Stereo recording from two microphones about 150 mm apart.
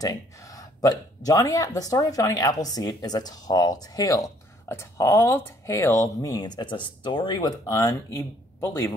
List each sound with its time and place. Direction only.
0.0 s speech: 20° left (ahead or behind)